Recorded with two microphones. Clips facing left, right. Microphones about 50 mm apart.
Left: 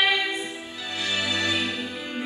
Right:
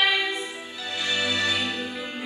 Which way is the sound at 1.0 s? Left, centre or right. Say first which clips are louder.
Right 1 dB; centre.